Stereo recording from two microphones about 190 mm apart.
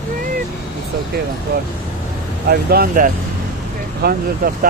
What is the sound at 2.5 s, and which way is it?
Speech, 55° right (ahead or behind).